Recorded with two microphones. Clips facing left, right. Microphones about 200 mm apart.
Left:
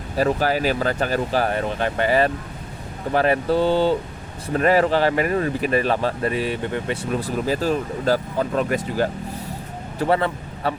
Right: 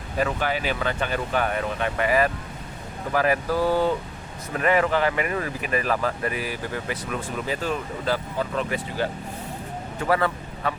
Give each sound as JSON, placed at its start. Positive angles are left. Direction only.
{"t": 0.2, "sound": "speech", "side_deg": 40}
{"t": 10.0, "sound": "speech", "side_deg": 25}